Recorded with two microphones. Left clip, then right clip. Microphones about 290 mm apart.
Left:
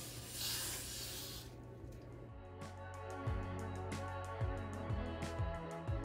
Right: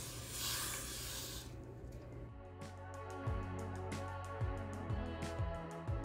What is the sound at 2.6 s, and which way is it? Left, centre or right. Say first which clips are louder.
Music: even; centre.